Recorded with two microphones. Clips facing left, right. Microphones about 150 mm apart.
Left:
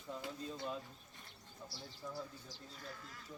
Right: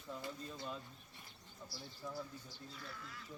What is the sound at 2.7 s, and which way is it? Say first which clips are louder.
Speech: left 1 dB; 40° left (ahead or behind).